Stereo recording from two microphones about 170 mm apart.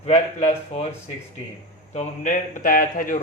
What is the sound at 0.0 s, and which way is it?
Speech, 40° left (ahead or behind).